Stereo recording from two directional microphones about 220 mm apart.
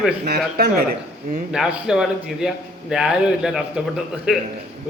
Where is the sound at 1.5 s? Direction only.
5° right (ahead or behind).